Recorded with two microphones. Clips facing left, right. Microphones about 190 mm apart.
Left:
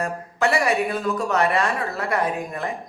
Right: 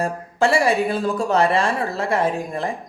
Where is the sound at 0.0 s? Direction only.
30° right (ahead or behind).